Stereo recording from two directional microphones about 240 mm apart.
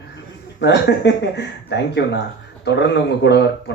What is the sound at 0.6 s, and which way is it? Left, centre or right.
Speech, left.